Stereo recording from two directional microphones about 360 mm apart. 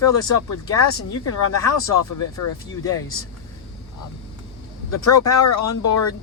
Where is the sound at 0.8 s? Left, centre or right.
Left.